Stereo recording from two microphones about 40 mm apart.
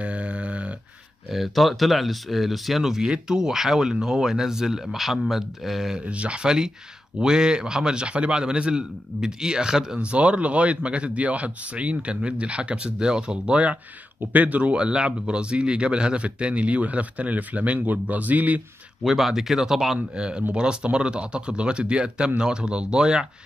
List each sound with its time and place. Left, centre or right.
0.0 s a sound: right
1.3 s speech: centre
2.8 s speech: centre
5.9 s speech: right
10.0 s speech: right
19.0 s speech: centre
20.2 s speech: right